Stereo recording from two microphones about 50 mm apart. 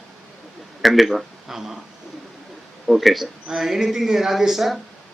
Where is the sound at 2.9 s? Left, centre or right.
Centre.